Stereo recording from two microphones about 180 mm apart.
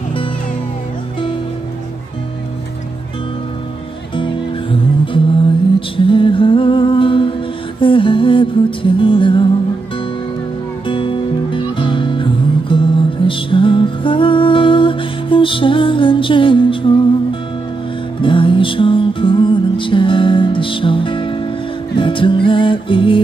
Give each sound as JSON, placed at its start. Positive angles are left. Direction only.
{"t": 4.1, "sound": "music", "side_deg": 30}
{"t": 10.9, "sound": "music", "side_deg": 30}